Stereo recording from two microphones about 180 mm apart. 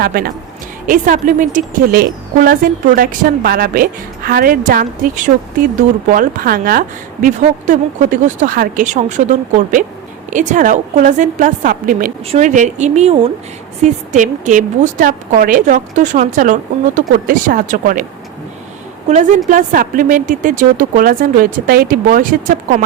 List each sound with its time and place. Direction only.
0.0 s speech: 55° right (ahead or behind)
19.0 s a woman's voice: 40° right (ahead or behind)